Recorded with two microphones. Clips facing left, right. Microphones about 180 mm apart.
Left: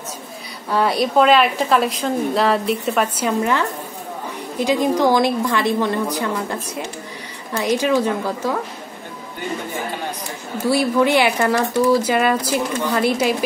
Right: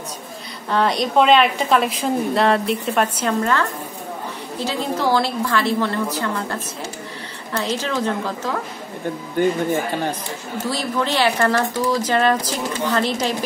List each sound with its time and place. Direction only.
0.7 s a woman's voice: 5° left (ahead or behind)
10.6 s speech: 10° left (ahead or behind)